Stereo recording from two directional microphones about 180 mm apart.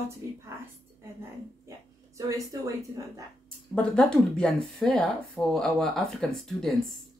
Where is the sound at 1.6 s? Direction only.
15° right (ahead or behind).